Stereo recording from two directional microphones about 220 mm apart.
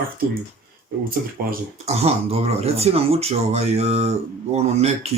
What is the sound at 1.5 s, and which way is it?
Speech, 30° right (ahead or behind).